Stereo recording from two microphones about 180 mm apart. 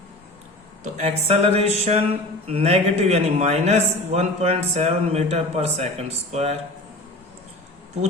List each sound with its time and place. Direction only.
0.9 s a man's voice: 35° right (ahead or behind)